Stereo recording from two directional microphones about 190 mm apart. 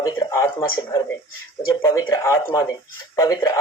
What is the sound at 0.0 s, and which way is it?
Speech, 15° left (ahead or behind).